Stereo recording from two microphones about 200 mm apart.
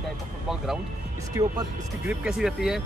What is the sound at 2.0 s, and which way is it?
Speech, centre (ahead or behind).